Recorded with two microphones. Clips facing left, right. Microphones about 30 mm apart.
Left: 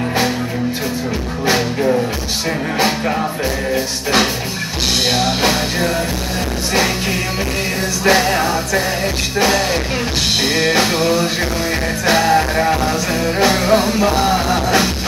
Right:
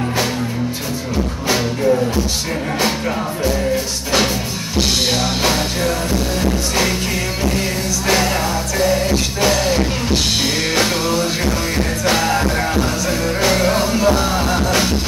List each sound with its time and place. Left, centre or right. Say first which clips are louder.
5.0 s music: left 2 dB; centre
10.5 s music: left 3 dB; left
13.4 s music: left 3 dB; centre